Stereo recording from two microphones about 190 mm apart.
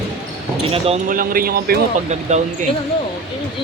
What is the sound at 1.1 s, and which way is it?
Speech, 45° right (ahead or behind).